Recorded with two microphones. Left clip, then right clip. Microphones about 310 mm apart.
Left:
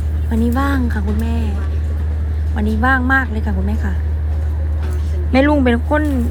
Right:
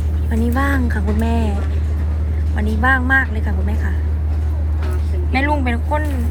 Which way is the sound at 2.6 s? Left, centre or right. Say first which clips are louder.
Left 1 dB; centre.